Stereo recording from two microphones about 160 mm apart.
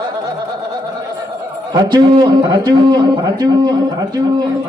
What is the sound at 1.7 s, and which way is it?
A man's voice, 25° right (ahead or behind).